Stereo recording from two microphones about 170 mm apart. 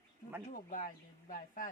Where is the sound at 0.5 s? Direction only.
50° left (ahead or behind).